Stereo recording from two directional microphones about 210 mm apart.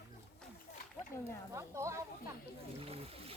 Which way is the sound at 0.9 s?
15° left (ahead or behind).